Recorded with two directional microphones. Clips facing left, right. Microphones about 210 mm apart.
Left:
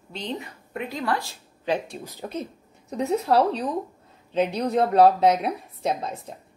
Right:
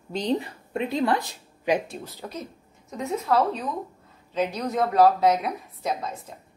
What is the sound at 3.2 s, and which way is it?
A woman's voice, 35° left (ahead or behind).